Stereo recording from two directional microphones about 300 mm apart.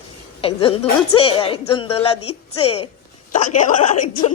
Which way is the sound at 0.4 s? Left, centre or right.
Centre.